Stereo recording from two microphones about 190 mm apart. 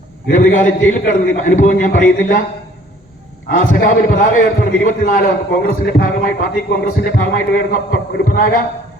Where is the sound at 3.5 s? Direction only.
45° left (ahead or behind).